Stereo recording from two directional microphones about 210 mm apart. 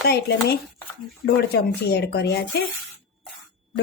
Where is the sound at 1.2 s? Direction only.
50° left (ahead or behind).